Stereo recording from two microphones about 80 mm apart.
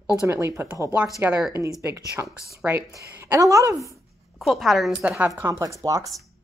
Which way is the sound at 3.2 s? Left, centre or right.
Right.